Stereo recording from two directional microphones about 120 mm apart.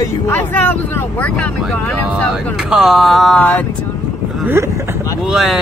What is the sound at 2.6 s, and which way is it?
Speech, 5° right (ahead or behind).